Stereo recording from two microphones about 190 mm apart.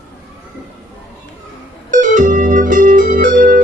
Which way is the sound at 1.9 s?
40° right (ahead or behind).